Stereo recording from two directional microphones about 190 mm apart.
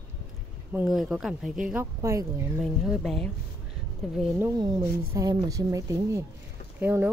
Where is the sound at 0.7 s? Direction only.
Centre (ahead or behind).